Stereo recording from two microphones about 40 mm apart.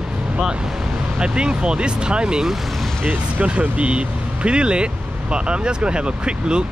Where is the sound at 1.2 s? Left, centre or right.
Right.